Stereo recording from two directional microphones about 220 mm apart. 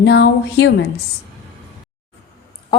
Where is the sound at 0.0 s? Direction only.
50° left (ahead or behind).